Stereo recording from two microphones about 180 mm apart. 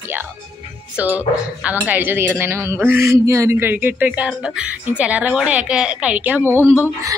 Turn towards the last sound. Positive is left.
turn(degrees=-10)  # may be behind; listen again after turning